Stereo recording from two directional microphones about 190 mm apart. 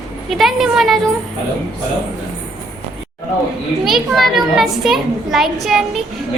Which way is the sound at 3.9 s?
Centre (ahead or behind).